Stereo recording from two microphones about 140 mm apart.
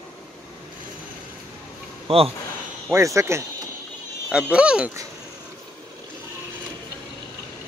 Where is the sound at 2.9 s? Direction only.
20° right (ahead or behind).